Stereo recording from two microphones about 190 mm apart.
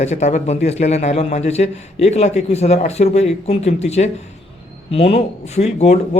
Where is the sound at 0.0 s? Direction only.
35° left (ahead or behind).